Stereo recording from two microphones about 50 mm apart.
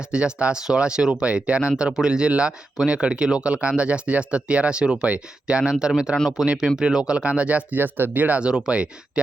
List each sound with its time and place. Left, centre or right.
0.1 s speech: centre; by 8.4 s right
8.4 s speech: centre